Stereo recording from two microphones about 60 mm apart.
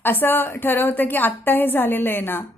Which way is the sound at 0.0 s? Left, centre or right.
Left.